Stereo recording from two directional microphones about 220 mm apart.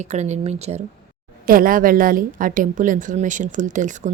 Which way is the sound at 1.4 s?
40° right (ahead or behind).